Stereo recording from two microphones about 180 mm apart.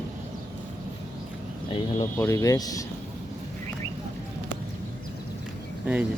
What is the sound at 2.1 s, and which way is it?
Speech, 15° left (ahead or behind).